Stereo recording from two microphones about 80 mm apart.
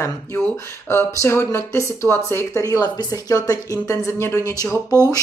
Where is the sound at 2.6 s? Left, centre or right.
Left.